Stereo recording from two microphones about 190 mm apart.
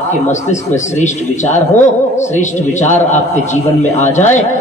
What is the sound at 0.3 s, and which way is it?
A man's voice, 40° left (ahead or behind).